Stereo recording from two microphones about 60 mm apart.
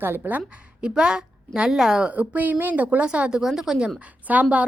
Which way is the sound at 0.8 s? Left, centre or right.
Centre.